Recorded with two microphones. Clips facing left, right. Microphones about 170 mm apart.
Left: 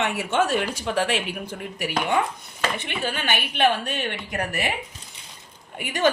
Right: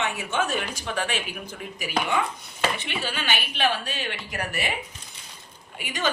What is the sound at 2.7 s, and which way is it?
A woman's voice, 50° left (ahead or behind).